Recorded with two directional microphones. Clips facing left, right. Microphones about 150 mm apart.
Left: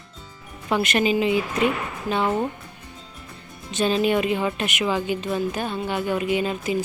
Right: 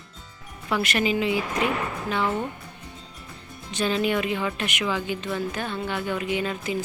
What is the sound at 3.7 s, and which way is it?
A woman's voice, 20° left (ahead or behind).